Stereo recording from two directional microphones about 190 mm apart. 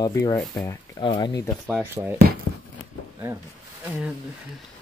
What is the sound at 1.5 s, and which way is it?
Speech, centre (ahead or behind).